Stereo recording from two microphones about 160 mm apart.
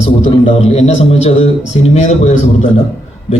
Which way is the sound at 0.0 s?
35° left (ahead or behind).